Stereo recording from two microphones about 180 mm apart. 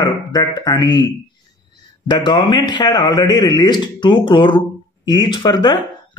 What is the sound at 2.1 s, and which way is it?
Speech, 25° left (ahead or behind).